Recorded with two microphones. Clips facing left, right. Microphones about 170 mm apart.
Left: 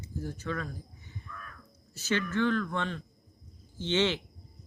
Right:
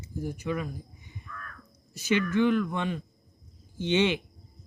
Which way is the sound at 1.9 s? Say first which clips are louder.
Right 5 dB; 10° right (ahead or behind).